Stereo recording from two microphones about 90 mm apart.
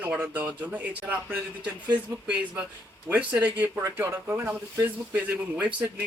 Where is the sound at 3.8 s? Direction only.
25° right (ahead or behind).